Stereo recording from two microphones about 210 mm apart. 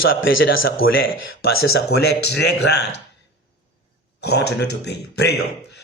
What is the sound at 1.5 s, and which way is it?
A man's voice, 50° left (ahead or behind).